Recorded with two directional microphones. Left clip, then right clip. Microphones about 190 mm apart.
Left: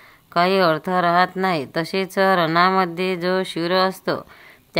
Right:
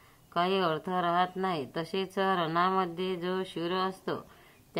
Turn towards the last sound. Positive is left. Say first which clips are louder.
# left 12 dB
turn(degrees=40)  # may be behind; listen again after turning